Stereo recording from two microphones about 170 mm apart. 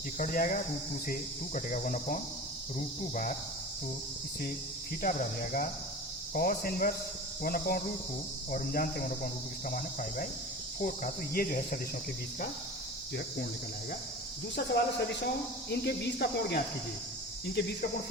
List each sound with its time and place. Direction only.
0.2 s cricket: 55° left (ahead or behind)
5.0 s cricket: 55° left (ahead or behind)
14.5 s speech: 80° left